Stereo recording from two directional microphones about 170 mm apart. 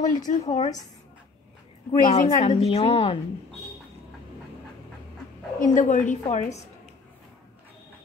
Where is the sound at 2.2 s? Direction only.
35° left (ahead or behind).